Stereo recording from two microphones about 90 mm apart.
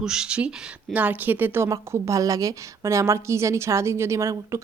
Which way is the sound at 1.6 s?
35° right (ahead or behind).